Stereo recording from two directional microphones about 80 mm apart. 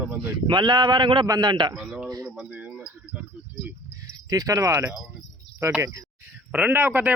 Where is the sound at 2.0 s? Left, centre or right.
Right.